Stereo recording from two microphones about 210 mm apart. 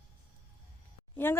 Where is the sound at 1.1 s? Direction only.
10° left (ahead or behind).